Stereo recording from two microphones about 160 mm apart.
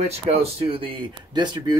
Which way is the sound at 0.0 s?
40° right (ahead or behind).